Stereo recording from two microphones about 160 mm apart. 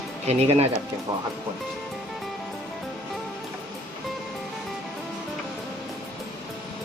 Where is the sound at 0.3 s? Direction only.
40° right (ahead or behind).